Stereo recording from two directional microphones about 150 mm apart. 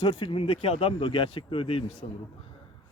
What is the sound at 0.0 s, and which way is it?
Speech, 35° left (ahead or behind).